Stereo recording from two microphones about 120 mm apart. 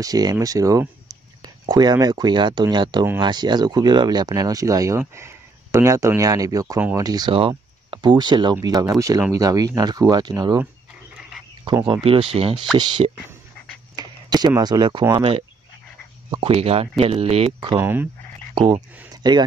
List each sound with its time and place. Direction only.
0.0 s speech: 30° right (ahead or behind)
7.3 s speech: 45° right (ahead or behind)
12.0 s speech: 50° right (ahead or behind)
12.7 s speech: 40° right (ahead or behind)
13.9 s a sound: 35° right (ahead or behind)
14.6 s speech: 35° right (ahead or behind)
16.3 s speech: 45° right (ahead or behind)
17.7 s speech: 15° right (ahead or behind)
18.5 s speech: 35° right (ahead or behind)